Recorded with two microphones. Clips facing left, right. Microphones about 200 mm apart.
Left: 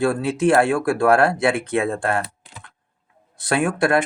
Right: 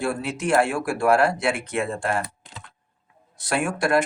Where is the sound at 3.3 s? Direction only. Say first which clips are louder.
Left 4 dB; 60° left (ahead or behind).